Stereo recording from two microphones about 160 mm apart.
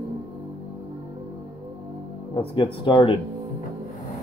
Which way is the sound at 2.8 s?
30° left (ahead or behind).